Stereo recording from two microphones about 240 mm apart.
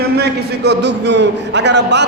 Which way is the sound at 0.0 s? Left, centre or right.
Right.